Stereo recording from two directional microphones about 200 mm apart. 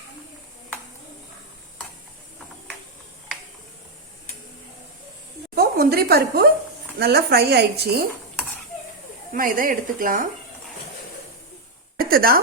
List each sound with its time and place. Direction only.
5.5 s a woman's voice: 50° right (ahead or behind)
9.3 s a woman's voice: 45° right (ahead or behind)
11.9 s a sound: 45° right (ahead or behind)